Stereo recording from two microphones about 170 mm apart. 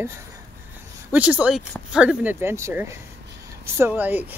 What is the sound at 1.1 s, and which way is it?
Speech, 10° right (ahead or behind).